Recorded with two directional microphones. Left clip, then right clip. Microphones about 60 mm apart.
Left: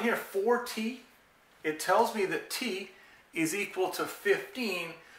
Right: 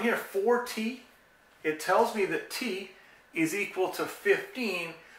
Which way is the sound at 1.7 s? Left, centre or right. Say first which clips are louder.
Right 1 dB; left.